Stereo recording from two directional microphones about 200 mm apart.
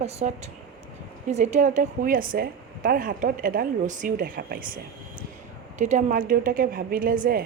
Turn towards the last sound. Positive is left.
turn(degrees=-45)  # may be behind; listen again after turning